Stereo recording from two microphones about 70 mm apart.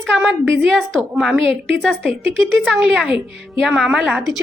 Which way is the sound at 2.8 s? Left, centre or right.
Centre.